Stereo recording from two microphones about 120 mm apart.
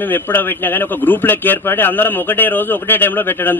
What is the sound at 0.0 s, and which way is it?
A man's voice, 15° left (ahead or behind).